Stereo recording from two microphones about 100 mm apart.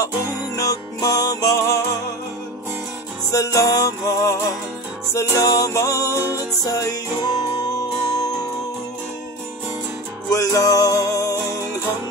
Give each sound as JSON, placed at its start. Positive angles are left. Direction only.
{"t": 0.6, "sound": "music", "side_deg": 35}
{"t": 3.3, "sound": "music", "side_deg": 35}
{"t": 5.4, "sound": "music", "side_deg": 35}
{"t": 10.3, "sound": "music", "side_deg": 35}